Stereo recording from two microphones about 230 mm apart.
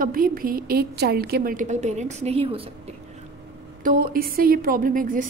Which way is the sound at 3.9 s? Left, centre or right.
Right.